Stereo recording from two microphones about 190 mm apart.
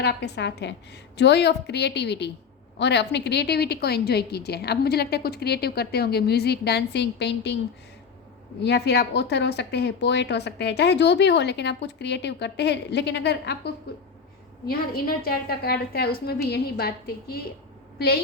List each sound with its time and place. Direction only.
0.0 s a woman's voice: 60° left (ahead or behind)
8.6 s a woman's voice: 60° left (ahead or behind)
14.7 s a woman's voice: 50° left (ahead or behind)